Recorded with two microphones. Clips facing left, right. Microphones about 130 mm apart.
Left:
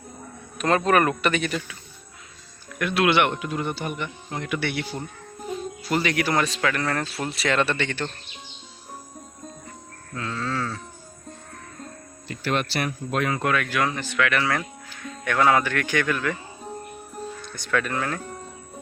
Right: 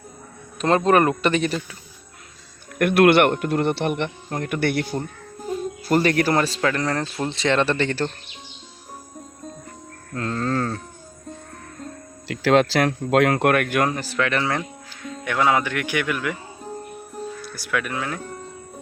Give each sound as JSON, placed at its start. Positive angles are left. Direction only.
{"t": 0.6, "sound": "a man's voice", "side_deg": -30}
{"t": 2.7, "sound": "speech", "side_deg": -55}
{"t": 4.3, "sound": "speech", "side_deg": -50}
{"t": 4.9, "sound": "music", "side_deg": 0}
{"t": 5.9, "sound": "a man's voice", "side_deg": -45}
{"t": 10.2, "sound": "speech", "side_deg": -45}
{"t": 12.3, "sound": "speech", "side_deg": -90}
{"t": 15.2, "sound": "speech", "side_deg": -15}
{"t": 17.4, "sound": "speech", "side_deg": -5}